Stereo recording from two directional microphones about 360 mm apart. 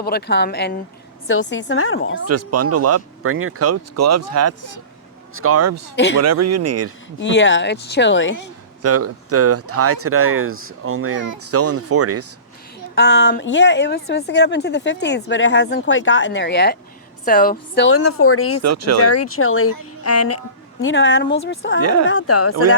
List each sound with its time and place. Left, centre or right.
0.0 s a woman's voice: left
2.2 s speech: right
7.2 s a woman's voice: left
8.8 s speech: right
13.0 s a woman's voice: left
18.6 s speech: right
19.0 s a woman's voice: left
20.8 s speech: left
21.8 s speech: right
22.0 s a woman's voice: left